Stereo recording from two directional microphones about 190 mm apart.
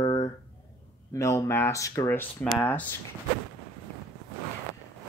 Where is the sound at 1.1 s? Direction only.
15° left (ahead or behind).